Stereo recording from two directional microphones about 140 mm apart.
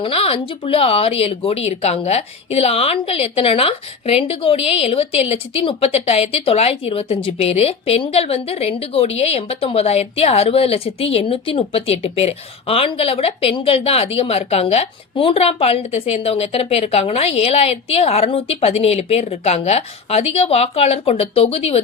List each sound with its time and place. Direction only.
0.0 s speech: 40° left (ahead or behind)